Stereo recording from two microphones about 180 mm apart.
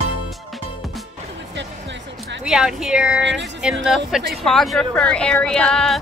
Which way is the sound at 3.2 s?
85° right.